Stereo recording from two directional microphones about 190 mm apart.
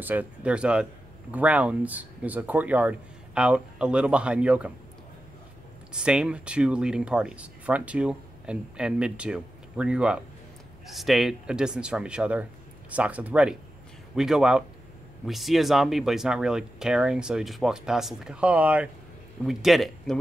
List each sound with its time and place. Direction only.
0.0 s speech: 10° right (ahead or behind)
5.9 s speech: 5° right (ahead or behind)